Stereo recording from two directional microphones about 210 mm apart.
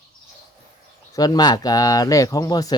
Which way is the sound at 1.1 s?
20° left (ahead or behind).